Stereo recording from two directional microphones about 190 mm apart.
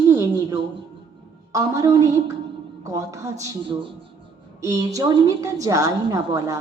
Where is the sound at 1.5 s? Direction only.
20° right (ahead or behind).